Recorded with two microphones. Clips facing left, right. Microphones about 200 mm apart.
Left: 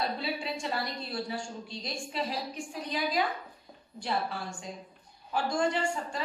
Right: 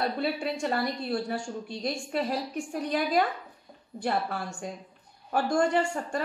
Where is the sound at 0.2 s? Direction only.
55° right (ahead or behind).